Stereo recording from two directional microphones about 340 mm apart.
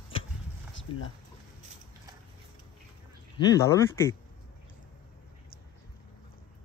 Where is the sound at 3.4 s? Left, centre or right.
Centre.